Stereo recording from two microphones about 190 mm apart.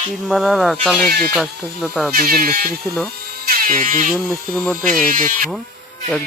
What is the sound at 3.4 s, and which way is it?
Dental drill, 50° right (ahead or behind).